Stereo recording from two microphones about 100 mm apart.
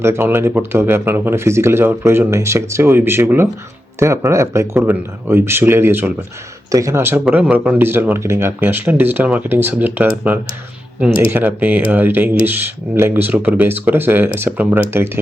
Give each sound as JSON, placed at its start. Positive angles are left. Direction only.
{"t": 0.0, "sound": "speech", "side_deg": -25}
{"t": 6.7, "sound": "speech", "side_deg": -30}